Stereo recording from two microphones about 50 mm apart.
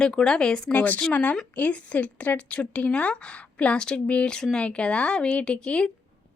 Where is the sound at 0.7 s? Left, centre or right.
Left.